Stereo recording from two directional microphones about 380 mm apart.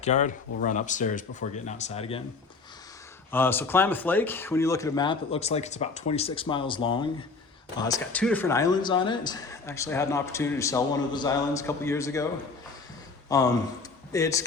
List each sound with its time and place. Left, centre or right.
0.0 s speech: centre
3.3 s speech: centre